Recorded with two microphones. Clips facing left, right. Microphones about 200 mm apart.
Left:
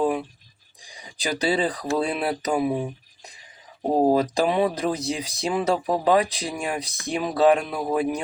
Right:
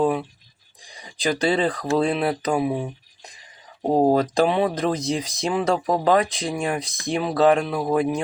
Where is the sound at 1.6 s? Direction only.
5° left (ahead or behind).